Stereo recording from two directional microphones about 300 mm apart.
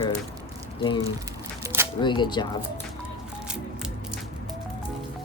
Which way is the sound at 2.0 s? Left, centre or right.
Centre.